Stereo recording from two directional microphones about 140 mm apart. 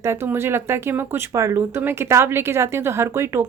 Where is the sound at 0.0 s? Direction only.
20° right (ahead or behind).